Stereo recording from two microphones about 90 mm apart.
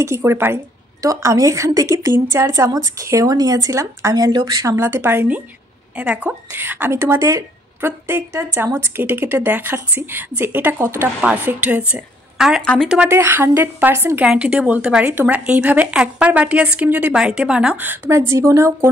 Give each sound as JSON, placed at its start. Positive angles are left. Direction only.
{"t": 0.0, "sound": "a woman's voice", "side_deg": -30}
{"t": 4.7, "sound": "a woman's voice", "side_deg": -25}
{"t": 5.9, "sound": "a woman's voice", "side_deg": -15}
{"t": 12.4, "sound": "a woman's voice", "side_deg": -5}
{"t": 13.1, "sound": "a woman's voice", "side_deg": -25}
{"t": 14.2, "sound": "a woman's voice", "side_deg": -10}
{"t": 17.1, "sound": "a woman's voice", "side_deg": -5}
{"t": 17.8, "sound": "a woman's voice", "side_deg": -25}